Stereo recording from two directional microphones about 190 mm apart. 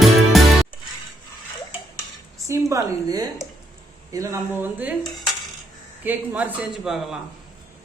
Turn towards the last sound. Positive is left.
turn(degrees=0)  # may be behind; listen again after turning